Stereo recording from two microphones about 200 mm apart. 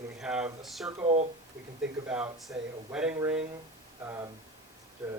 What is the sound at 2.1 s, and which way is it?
Speech, 5° right (ahead or behind).